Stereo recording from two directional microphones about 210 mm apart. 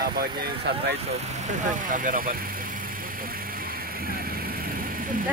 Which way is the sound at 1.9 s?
40° right (ahead or behind).